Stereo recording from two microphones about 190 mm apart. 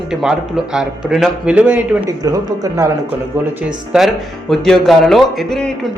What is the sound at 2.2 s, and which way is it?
Speech, 20° right (ahead or behind).